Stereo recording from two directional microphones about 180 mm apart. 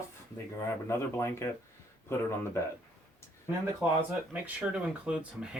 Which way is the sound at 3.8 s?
10° right (ahead or behind).